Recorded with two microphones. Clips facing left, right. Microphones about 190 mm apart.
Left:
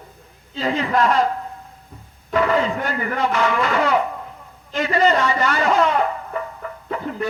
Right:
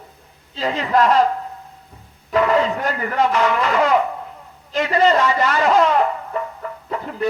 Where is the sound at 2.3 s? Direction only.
35° right (ahead or behind).